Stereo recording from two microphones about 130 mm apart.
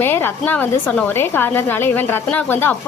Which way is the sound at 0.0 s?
15° left (ahead or behind).